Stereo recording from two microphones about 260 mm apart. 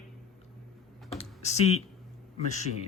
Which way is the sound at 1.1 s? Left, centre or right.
Left.